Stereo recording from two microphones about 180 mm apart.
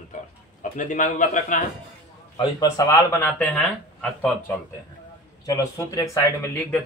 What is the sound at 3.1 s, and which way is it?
Speech, 5° left (ahead or behind).